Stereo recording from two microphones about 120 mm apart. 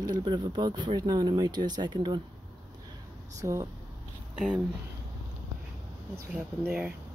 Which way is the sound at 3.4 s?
25° right (ahead or behind).